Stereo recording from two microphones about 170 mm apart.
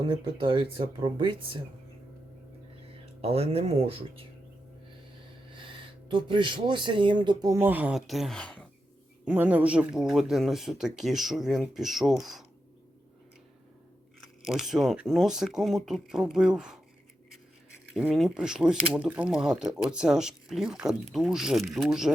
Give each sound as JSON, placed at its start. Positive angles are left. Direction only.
{"t": 0.0, "sound": "speech", "side_deg": -25}
{"t": 2.8, "sound": "speech", "side_deg": -35}
{"t": 5.5, "sound": "speech", "side_deg": -30}
{"t": 9.2, "sound": "speech", "side_deg": -10}
{"t": 14.4, "sound": "speech", "side_deg": 0}
{"t": 17.9, "sound": "speech", "side_deg": -5}